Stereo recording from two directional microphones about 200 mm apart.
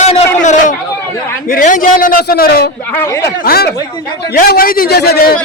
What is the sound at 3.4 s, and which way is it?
A man's voice, 50° left (ahead or behind).